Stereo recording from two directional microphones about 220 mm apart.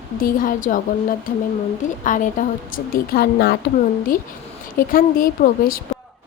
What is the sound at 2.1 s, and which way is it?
A woman's voice, 35° left (ahead or behind).